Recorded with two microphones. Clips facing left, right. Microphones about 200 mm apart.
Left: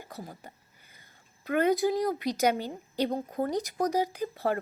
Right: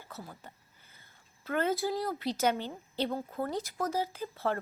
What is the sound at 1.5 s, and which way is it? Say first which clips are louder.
A woman's voice: left 5 dB; 15° left (ahead or behind).